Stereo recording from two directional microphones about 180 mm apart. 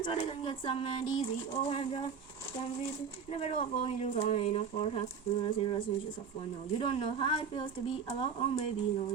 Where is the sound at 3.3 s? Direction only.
35° left (ahead or behind).